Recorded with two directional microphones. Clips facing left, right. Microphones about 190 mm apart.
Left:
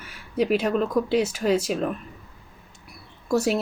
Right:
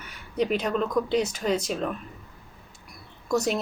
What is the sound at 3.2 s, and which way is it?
Speech, 5° left (ahead or behind).